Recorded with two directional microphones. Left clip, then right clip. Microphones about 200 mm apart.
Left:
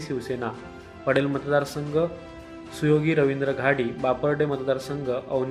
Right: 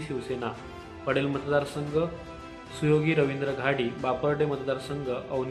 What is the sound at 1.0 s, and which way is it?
Speech, 15° left (ahead or behind).